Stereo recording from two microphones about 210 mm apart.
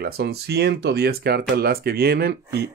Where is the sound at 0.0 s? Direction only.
50° right (ahead or behind).